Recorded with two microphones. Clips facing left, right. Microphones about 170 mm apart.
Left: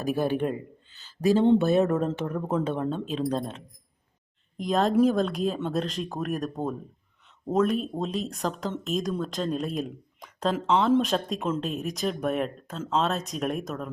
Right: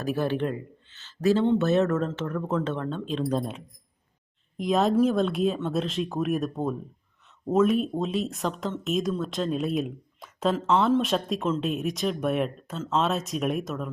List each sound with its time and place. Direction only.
0.0 s speech: 15° left (ahead or behind)